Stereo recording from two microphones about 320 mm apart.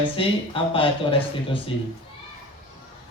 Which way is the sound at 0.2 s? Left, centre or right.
Centre.